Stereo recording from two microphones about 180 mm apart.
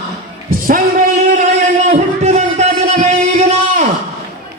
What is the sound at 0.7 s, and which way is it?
Music, 50° right (ahead or behind).